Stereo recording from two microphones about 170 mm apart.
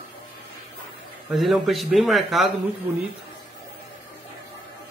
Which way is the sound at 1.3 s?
Centre (ahead or behind).